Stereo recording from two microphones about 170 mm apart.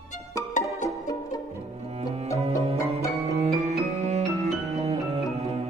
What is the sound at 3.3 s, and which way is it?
Music, 40° right (ahead or behind).